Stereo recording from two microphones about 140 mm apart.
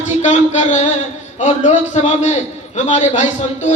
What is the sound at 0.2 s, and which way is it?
A man's voice, 55° left (ahead or behind).